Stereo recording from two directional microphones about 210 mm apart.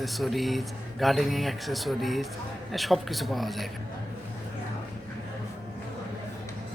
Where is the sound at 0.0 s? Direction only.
Centre (ahead or behind).